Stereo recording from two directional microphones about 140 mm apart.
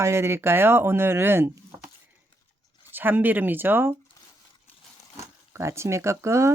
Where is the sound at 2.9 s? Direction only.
15° right (ahead or behind).